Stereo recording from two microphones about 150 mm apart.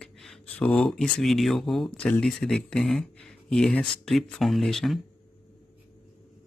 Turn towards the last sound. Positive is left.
turn(degrees=0)  # may be behind; listen again after turning